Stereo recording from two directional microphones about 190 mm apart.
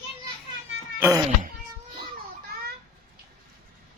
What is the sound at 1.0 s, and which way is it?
Cat, 15° right (ahead or behind).